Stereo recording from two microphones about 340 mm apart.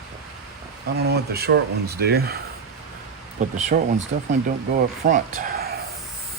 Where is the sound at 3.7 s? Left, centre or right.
Right.